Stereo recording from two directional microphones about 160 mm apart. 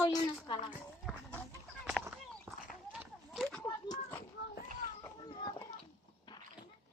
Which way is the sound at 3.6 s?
25° left (ahead or behind).